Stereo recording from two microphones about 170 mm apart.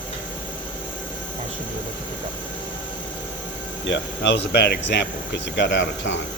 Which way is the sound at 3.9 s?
90° left.